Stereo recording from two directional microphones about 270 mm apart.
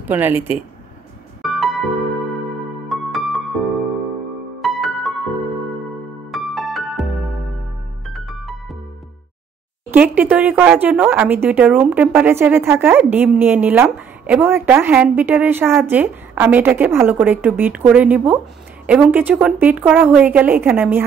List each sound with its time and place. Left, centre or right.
0.0 s speech: centre
1.4 s music: centre
2.9 s music: centre
4.6 s music: centre
6.3 s music: centre
9.8 s a woman's voice: centre